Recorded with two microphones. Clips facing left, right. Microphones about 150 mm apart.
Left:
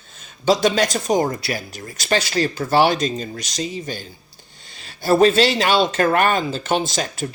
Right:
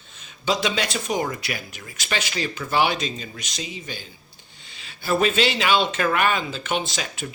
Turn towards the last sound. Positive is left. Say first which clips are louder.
# left 5 dB
turn(degrees=40)  # may be behind; listen again after turning